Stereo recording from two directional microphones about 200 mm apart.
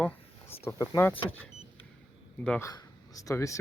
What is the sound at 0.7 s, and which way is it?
Speech, 15° left (ahead or behind).